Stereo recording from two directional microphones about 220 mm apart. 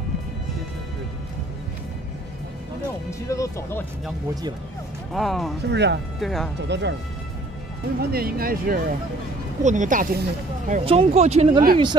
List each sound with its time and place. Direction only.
3.1 s speech: 15° left (ahead or behind)
5.1 s speech: centre (ahead or behind)
5.6 s speech: 50° right (ahead or behind)
6.1 s speech: centre (ahead or behind)
6.7 s speech: 50° right (ahead or behind)
8.0 s speech: 45° right (ahead or behind)
10.7 s speech: 25° right (ahead or behind)